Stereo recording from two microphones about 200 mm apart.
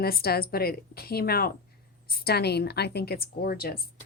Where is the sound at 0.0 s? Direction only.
50° left (ahead or behind).